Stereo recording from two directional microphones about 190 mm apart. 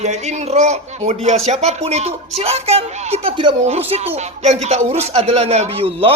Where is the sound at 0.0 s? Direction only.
35° right (ahead or behind).